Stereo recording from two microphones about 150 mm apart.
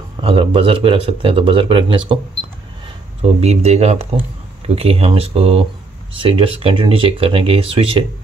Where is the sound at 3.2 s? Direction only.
45° right (ahead or behind).